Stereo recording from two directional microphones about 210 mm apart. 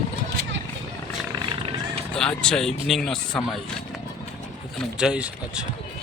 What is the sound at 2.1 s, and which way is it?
Speech, 5° left (ahead or behind).